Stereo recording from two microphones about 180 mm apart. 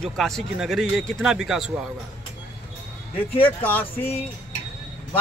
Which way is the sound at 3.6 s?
10° left (ahead or behind).